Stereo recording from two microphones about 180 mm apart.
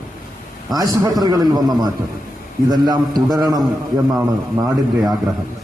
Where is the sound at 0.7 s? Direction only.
20° right (ahead or behind).